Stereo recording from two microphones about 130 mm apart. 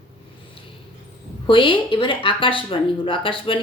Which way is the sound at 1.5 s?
40° left (ahead or behind).